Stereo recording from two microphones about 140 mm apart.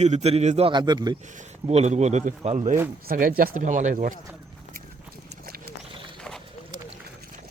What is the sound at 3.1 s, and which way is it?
Speech, 90° right.